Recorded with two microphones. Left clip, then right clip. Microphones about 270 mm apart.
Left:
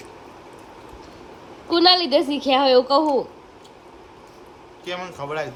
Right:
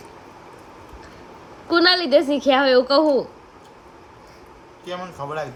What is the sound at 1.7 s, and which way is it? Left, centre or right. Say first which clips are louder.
A woman's voice: even; centre.